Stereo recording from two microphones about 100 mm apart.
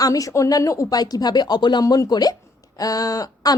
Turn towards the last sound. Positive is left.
turn(degrees=40)  # may be behind; listen again after turning